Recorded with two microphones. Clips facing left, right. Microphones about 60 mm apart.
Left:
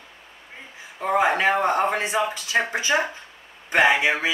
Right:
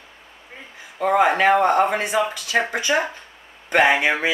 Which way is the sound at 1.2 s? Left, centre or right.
Centre.